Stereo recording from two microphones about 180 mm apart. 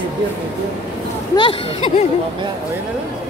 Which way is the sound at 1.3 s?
30° left (ahead or behind).